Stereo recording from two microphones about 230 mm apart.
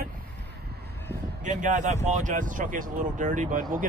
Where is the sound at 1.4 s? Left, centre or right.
Right.